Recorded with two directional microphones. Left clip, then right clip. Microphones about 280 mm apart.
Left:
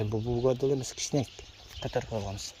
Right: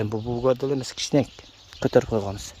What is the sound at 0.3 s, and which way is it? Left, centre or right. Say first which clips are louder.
Speech: right 4 dB; right.